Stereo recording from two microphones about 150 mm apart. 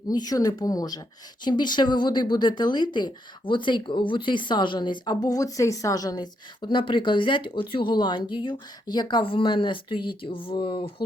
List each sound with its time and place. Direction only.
0.1 s speech: 25° left (ahead or behind)